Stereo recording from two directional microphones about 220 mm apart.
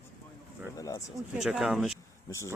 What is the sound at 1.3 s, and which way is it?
Speech, centre (ahead or behind).